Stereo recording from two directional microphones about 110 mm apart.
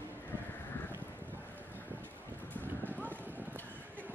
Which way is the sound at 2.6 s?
15° left (ahead or behind).